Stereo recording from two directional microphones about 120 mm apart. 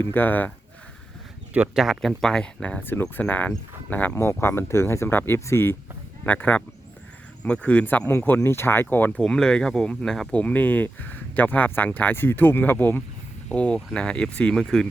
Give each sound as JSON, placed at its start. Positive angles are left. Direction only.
{"t": 0.0, "sound": "speech", "side_deg": 15}
{"t": 1.5, "sound": "speech", "side_deg": -5}